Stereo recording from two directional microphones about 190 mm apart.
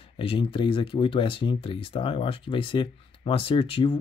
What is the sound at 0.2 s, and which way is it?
Speech, 30° left (ahead or behind).